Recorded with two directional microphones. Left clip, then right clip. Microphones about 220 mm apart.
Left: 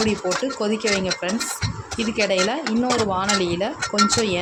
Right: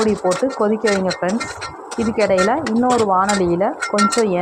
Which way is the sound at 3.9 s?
10° left (ahead or behind).